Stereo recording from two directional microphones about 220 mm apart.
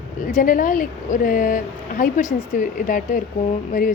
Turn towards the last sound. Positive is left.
turn(degrees=35)  # may be behind; listen again after turning